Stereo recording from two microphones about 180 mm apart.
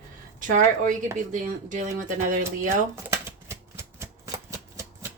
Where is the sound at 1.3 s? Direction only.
45° right (ahead or behind).